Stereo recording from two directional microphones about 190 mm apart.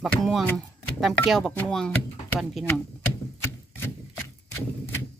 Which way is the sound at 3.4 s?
15° left (ahead or behind).